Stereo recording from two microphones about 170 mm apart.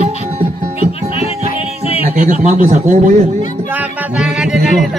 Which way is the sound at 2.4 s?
45° right (ahead or behind).